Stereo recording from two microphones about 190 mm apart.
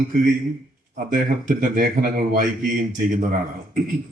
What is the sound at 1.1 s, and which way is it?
Speech, 45° right (ahead or behind).